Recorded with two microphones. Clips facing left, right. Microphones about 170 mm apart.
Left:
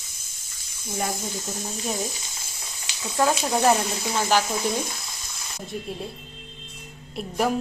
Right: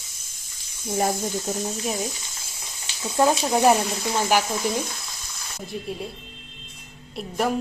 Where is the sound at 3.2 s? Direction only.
15° right (ahead or behind).